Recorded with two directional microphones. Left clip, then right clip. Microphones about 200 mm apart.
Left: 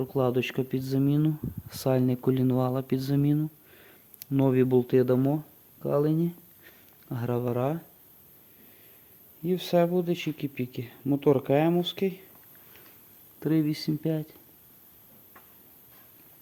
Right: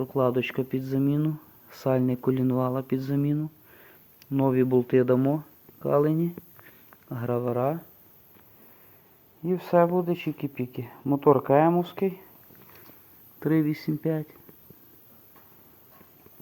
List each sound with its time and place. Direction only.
0.0 s speech: 35° left (ahead or behind)
9.5 s speech: 40° left (ahead or behind)
13.4 s speech: 20° left (ahead or behind)